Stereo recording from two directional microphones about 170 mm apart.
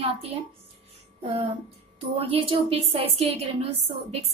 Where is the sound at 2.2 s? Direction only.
35° right (ahead or behind).